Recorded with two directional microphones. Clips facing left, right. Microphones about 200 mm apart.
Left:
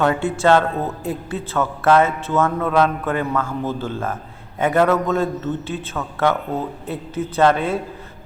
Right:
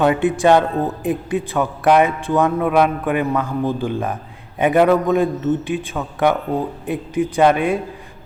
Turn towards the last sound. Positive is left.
turn(degrees=-15)  # may be behind; listen again after turning